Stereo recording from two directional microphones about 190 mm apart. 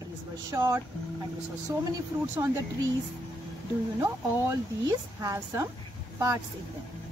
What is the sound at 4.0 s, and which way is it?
Speech, 15° right (ahead or behind).